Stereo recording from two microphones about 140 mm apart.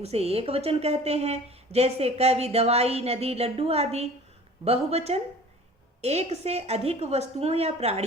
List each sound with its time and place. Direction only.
0.0 s a woman's voice: 45° right (ahead or behind)